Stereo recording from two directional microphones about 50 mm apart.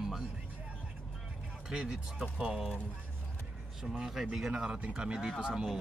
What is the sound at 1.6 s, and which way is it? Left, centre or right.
Speech, centre.